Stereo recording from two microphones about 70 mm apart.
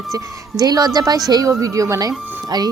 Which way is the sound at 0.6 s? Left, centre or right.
Right.